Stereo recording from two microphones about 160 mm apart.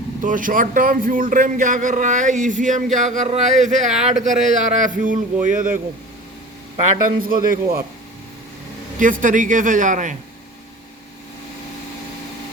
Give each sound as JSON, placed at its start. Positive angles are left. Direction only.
{"t": 0.2, "sound": "a man's voice", "side_deg": -55}
{"t": 7.2, "sound": "a man's voice", "side_deg": -60}
{"t": 9.0, "sound": "a man's voice", "side_deg": -55}